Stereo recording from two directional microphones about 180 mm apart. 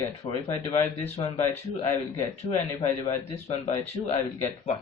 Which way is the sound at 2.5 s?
35° left (ahead or behind).